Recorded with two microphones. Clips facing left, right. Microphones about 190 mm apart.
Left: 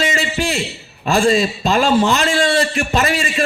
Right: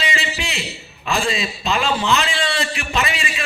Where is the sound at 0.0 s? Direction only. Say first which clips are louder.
Left 6 dB; 45° left (ahead or behind).